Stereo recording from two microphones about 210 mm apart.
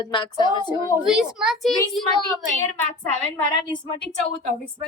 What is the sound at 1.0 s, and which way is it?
A child's voice, 5° right (ahead or behind).